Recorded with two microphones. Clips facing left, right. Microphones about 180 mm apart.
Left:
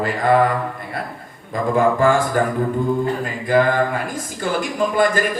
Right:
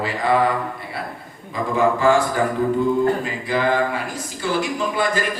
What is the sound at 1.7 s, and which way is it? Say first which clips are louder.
Speech: left 1 dB; 50° left (ahead or behind).